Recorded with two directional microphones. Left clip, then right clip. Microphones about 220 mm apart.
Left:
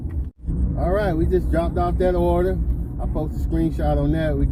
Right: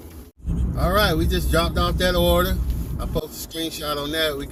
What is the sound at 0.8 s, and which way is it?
Speech, 10° right (ahead or behind).